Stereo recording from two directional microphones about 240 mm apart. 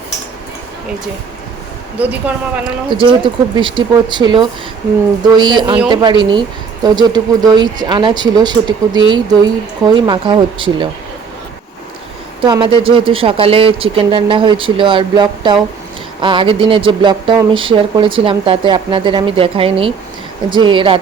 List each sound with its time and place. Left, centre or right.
2.0 s speech: centre
2.9 s speech: centre
12.4 s speech: centre